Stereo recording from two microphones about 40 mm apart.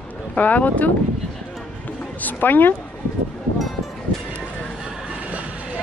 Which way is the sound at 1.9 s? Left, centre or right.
Left.